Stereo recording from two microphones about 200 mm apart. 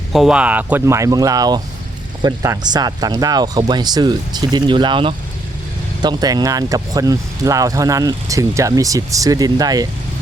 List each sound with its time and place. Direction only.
0.1 s speech: centre (ahead or behind); by 9.8 s 20° right (ahead or behind)